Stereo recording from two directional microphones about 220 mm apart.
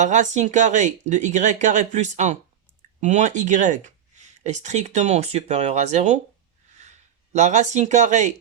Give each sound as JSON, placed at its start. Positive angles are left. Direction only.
{"t": 0.0, "sound": "speech", "side_deg": -35}